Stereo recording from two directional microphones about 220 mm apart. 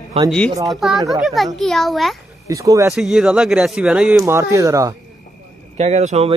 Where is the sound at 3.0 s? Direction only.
Centre (ahead or behind).